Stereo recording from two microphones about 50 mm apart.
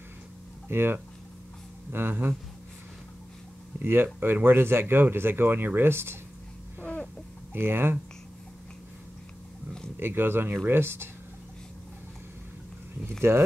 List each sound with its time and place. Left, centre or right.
0.7 s speech: right
3.8 s speech: right
7.5 s speech: right
9.9 s speech: right
13.3 s speech: right